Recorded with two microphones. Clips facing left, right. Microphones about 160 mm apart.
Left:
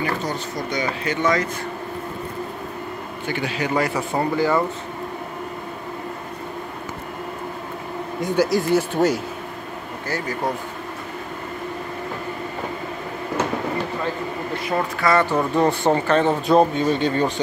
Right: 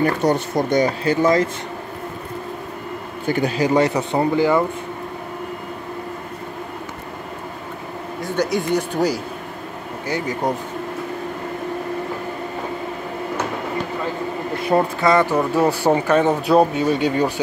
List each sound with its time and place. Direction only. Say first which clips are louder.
0.2 s speech: right 8 dB; 60° right (ahead or behind); by 1.5 s 30° right (ahead or behind)
3.3 s speech: right 6 dB; 40° right (ahead or behind); by 4.6 s 15° right (ahead or behind)
8.4 s speech: left 1 dB; centre (ahead or behind)
10.0 s speech: right 3 dB; 20° right (ahead or behind)
14.7 s speech: right 4 dB; 25° right (ahead or behind); by 17.3 s 10° right (ahead or behind)